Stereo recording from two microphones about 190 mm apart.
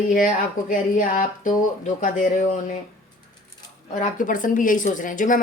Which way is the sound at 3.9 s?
40° left (ahead or behind).